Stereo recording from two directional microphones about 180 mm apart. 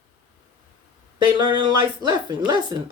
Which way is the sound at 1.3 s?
25° right (ahead or behind).